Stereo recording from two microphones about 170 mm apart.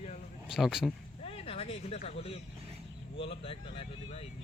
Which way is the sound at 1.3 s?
35° left (ahead or behind).